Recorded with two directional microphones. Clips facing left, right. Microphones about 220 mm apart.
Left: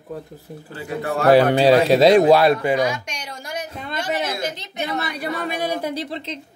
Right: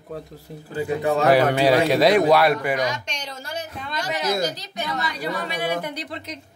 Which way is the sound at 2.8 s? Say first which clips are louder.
Left 3 dB; 10° left (ahead or behind).